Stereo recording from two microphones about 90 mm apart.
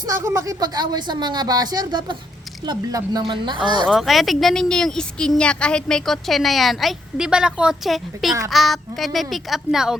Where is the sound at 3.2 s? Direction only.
60° right (ahead or behind).